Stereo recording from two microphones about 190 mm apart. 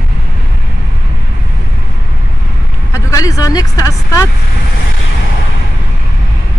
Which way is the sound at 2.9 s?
15° left (ahead or behind).